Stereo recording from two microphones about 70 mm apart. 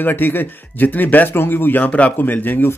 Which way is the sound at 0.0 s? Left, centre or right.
Left.